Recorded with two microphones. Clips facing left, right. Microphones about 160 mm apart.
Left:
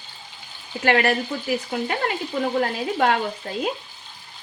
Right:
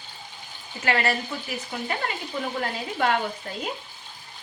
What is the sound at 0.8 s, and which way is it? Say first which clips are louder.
A woman's voice: left 5 dB; 60° left (ahead or behind).